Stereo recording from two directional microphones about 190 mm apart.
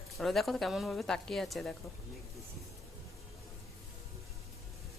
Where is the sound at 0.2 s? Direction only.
Centre (ahead or behind).